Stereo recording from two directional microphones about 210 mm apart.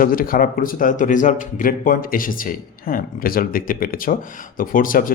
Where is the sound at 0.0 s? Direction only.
40° left (ahead or behind).